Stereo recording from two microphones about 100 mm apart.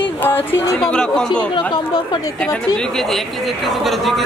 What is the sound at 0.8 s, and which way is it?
Speech, 5° left (ahead or behind).